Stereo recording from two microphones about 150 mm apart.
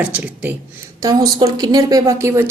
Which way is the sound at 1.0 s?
25° right (ahead or behind).